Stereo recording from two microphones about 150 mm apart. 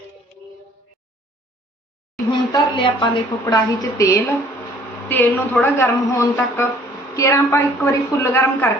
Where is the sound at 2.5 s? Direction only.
30° left (ahead or behind).